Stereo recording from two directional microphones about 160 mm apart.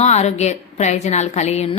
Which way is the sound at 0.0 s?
45° left (ahead or behind).